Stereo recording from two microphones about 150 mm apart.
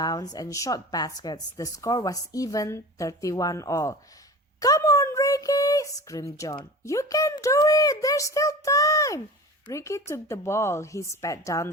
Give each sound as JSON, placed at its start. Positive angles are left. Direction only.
{"t": 0.0, "sound": "a woman's voice", "side_deg": 25}